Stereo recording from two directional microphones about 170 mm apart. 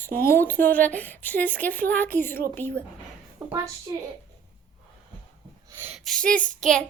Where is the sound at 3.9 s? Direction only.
20° right (ahead or behind).